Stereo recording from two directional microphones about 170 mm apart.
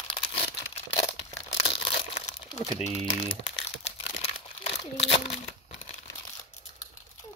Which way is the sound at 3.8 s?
35° left (ahead or behind).